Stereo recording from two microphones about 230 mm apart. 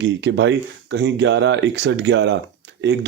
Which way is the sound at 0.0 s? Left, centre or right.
Right.